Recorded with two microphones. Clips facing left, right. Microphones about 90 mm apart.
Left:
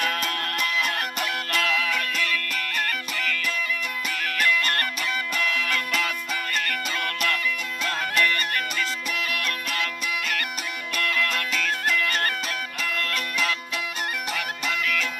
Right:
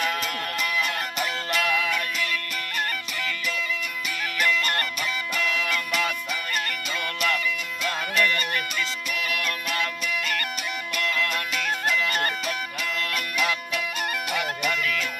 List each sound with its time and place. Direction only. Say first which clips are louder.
0.0 s music: even; 5° right (ahead or behind)
5.5 s music: even; 5° right (ahead or behind)
9.1 s music: right 3 dB; 5° right (ahead or behind)
11.2 s music: left 1 dB; 20° right (ahead or behind)